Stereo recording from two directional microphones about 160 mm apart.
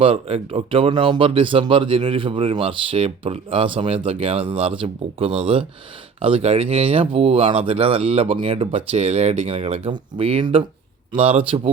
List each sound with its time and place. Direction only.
0.0 s speech: 35° right (ahead or behind)